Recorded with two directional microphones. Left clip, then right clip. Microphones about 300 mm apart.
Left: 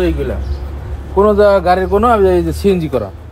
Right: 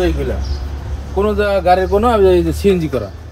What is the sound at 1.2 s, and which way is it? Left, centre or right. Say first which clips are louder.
Speech: left 6 dB; centre.